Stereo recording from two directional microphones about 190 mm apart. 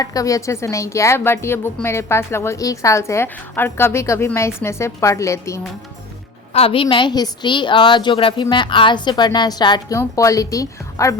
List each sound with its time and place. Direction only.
0.0 s a woman's voice: 20° left (ahead or behind)
6.5 s a woman's voice: 30° left (ahead or behind)